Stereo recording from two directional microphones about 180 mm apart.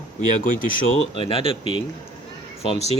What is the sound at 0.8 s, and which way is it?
Speech, 90° left.